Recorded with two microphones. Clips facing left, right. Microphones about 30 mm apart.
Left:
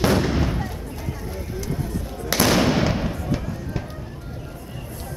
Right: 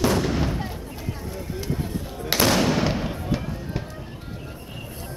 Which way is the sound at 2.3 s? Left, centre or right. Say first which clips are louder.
Left 1 dB; right.